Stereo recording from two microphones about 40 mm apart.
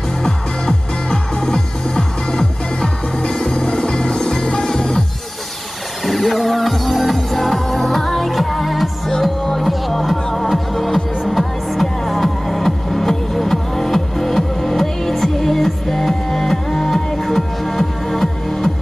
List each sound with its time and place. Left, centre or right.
1.4 s music: centre
6.0 s music: centre